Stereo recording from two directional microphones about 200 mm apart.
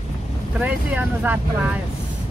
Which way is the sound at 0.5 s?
10° right (ahead or behind).